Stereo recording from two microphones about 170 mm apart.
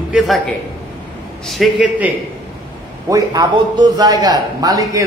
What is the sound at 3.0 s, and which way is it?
A man's voice, 20° right (ahead or behind).